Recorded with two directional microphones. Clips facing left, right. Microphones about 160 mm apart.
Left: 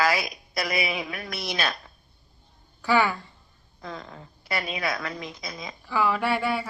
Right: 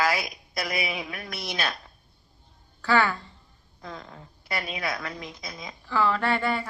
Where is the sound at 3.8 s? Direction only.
90° left.